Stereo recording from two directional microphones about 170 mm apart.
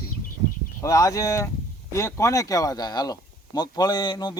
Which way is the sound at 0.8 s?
20° left (ahead or behind).